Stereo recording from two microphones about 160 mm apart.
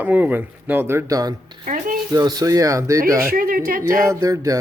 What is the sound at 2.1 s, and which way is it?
Speech, 25° right (ahead or behind).